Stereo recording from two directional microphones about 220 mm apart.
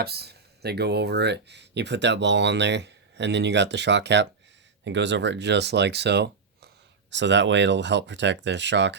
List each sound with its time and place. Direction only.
0.0 s speech: 45° right (ahead or behind)